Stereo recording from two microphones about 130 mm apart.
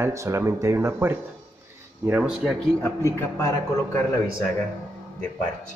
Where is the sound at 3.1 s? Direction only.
25° left (ahead or behind).